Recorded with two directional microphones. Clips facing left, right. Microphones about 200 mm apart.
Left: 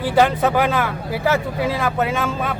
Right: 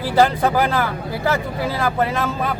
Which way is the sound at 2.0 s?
Centre (ahead or behind).